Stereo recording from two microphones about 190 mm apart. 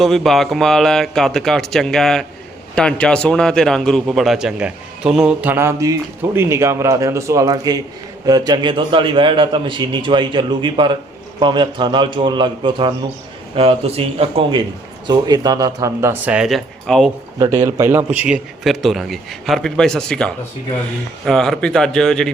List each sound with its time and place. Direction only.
0.0 s a man's voice: centre (ahead or behind)
17.4 s a man's voice: 20° right (ahead or behind); by 22.3 s 5° left (ahead or behind)